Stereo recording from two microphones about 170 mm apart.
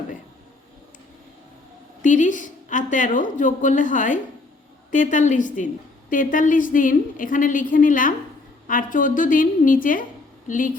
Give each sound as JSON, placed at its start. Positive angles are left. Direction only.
{"t": 2.0, "sound": "a woman's voice", "side_deg": 50}